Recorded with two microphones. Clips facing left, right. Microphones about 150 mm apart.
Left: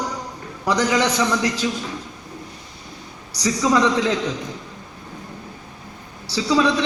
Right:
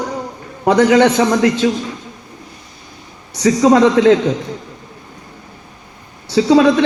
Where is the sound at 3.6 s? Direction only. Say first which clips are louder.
Right 8 dB; 70° right (ahead or behind).